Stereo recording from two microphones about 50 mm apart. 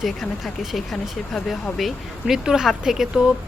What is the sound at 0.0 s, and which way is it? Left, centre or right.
Speech, centre.